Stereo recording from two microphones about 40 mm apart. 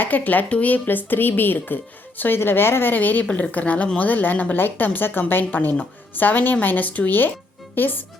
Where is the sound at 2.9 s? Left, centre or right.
Left.